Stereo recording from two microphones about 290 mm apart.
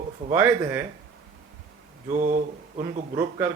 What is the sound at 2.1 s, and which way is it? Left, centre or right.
Speech, right.